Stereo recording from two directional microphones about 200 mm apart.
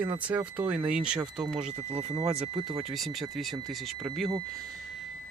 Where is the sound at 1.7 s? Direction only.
30° right (ahead or behind).